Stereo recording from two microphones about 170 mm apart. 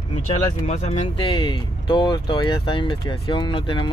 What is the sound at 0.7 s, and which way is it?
Speech, 35° left (ahead or behind).